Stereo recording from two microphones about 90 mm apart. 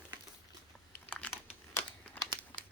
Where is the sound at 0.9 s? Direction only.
15° left (ahead or behind).